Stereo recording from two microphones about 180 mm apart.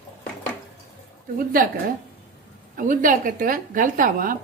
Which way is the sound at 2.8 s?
50° right (ahead or behind).